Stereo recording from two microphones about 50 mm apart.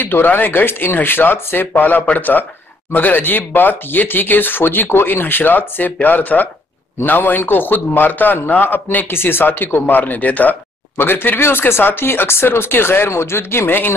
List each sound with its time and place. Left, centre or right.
0.0 s speech: left
9.1 s speech: left
11.0 s speech: left